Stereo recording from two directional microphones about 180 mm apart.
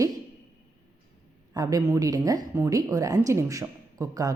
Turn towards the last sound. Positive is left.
turn(degrees=-20)  # may be behind; listen again after turning